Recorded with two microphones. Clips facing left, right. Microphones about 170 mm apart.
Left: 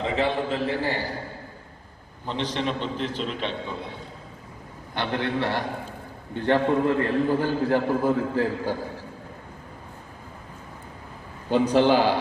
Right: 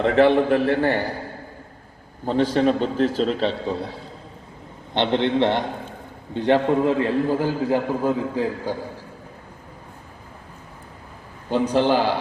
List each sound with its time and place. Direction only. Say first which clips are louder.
0.0 s a man's voice: right 9 dB; 65° right (ahead or behind)
2.2 s a man's voice: right 9 dB; 45° right (ahead or behind)
4.9 s a man's voice: right 7 dB; 25° right (ahead or behind)
11.5 s a man's voice: even; 15° left (ahead or behind)